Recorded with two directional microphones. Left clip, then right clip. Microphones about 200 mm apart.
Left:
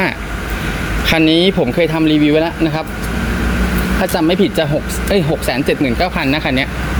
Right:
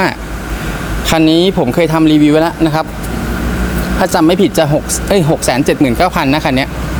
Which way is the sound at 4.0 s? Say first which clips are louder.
Right 5 dB; 15° right (ahead or behind).